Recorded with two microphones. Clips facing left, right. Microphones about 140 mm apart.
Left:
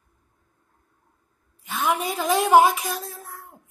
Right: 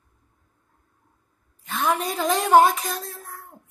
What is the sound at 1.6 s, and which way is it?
A child's voice, 5° left (ahead or behind).